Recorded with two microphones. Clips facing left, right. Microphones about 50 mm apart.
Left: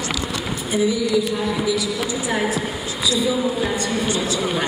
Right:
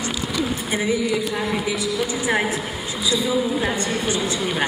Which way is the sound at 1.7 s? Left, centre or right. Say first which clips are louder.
Left 1 dB; right.